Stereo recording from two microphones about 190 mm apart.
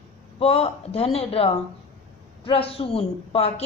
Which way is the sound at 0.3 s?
30° left (ahead or behind).